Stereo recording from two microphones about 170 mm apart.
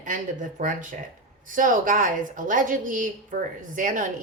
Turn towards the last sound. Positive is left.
turn(degrees=-50)  # may be behind; listen again after turning